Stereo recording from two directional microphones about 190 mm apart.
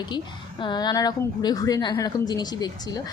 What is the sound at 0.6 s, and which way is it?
A woman's voice, 25° left (ahead or behind).